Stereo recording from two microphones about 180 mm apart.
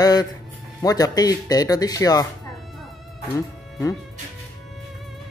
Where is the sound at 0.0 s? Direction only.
20° left (ahead or behind).